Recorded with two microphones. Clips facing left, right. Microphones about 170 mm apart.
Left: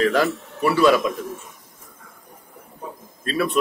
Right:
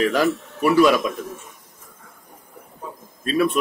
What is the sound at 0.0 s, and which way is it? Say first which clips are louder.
Speech: even; 10° right (ahead or behind).